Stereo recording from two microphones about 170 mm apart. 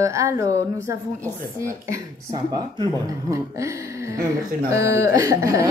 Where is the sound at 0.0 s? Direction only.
20° right (ahead or behind).